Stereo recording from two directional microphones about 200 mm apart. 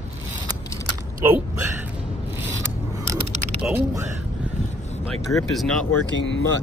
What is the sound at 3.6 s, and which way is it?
Speech, 10° right (ahead or behind).